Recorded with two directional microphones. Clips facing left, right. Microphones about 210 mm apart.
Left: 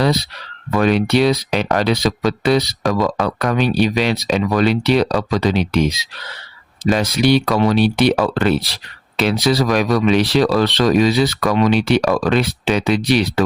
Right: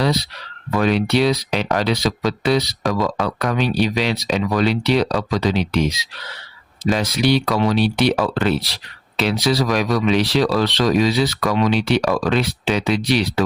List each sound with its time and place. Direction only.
0.8 s speech: 55° left (ahead or behind)
6.9 s speech: 50° left (ahead or behind)